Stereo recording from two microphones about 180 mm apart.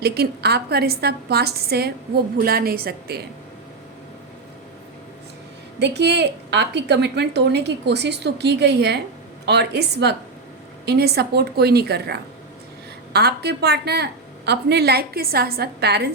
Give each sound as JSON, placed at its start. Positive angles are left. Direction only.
{"t": 0.0, "sound": "a woman's voice", "side_deg": -60}
{"t": 5.8, "sound": "a woman's voice", "side_deg": -70}